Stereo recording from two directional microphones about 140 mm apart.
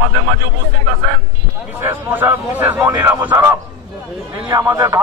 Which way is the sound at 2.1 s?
15° right (ahead or behind).